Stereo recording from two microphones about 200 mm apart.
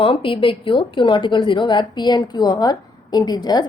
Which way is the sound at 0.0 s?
25° left (ahead or behind).